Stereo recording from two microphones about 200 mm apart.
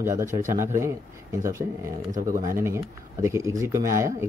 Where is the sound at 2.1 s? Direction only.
40° right (ahead or behind).